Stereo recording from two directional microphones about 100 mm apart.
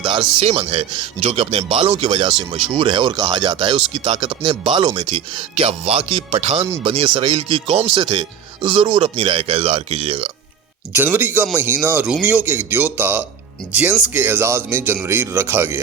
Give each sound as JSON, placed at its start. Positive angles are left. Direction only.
{"t": 0.0, "sound": "speech", "side_deg": -50}
{"t": 0.4, "sound": "speech", "side_deg": -80}
{"t": 6.8, "sound": "speech", "side_deg": -60}
{"t": 7.9, "sound": "speech", "side_deg": -50}
{"t": 9.0, "sound": "speech", "side_deg": -80}
{"t": 10.9, "sound": "speech", "side_deg": -20}